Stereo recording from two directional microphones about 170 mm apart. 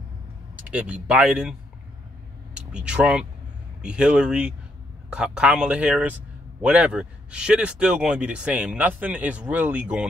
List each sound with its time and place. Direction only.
0.6 s speech: 5° right (ahead or behind)